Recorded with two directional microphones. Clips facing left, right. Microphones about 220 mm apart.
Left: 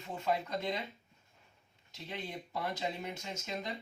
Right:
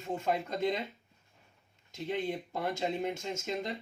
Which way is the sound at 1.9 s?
50° right (ahead or behind).